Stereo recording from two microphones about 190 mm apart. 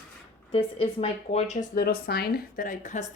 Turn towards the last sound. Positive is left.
turn(degrees=40)  # may be behind; listen again after turning